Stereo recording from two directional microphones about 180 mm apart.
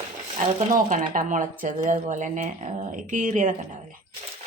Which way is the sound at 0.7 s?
45° right (ahead or behind).